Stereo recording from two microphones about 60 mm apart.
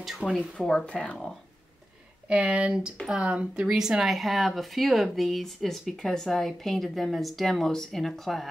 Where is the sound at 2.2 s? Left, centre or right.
Right.